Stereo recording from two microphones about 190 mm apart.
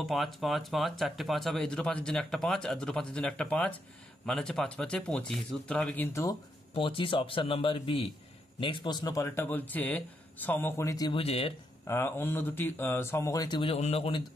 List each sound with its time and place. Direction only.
0.0 s speech: centre (ahead or behind)
6.7 s speech: 25° left (ahead or behind)
11.9 s speech: 10° left (ahead or behind); by 14.2 s 30° left (ahead or behind)